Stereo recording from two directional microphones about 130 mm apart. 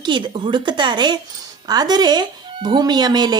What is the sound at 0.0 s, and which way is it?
A woman's voice, 40° right (ahead or behind).